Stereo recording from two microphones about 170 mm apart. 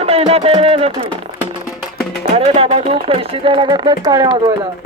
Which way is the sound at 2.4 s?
35° right (ahead or behind).